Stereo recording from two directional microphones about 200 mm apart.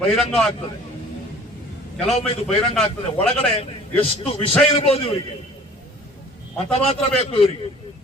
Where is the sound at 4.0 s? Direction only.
30° left (ahead or behind).